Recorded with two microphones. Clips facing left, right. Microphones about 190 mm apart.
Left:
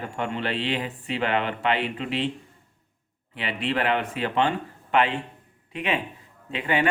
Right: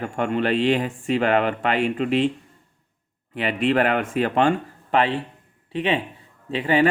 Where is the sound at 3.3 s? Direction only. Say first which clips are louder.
Right 7 dB; 45° right (ahead or behind).